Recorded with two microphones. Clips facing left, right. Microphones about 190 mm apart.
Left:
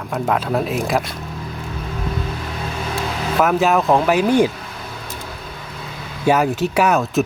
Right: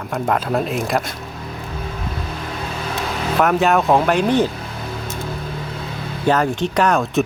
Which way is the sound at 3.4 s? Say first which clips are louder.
Even; centre (ahead or behind).